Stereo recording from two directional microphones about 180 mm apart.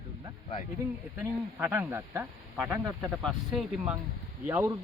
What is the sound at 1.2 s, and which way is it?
Speech, 10° right (ahead or behind).